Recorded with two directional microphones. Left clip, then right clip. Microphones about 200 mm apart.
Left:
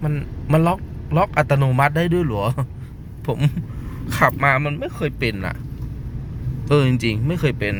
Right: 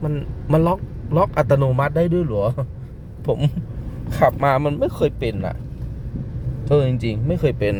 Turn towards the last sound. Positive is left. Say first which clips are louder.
# right 2 dB
turn(degrees=-15)  # may be behind; listen again after turning